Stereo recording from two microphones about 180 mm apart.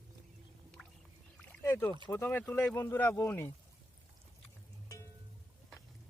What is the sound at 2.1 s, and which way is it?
Speech, 10° left (ahead or behind).